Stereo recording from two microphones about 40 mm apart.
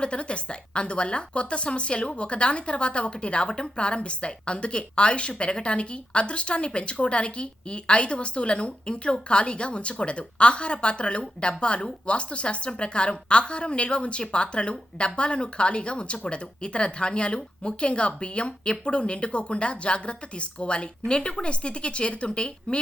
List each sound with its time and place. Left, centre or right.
0.0 s a woman's voice: left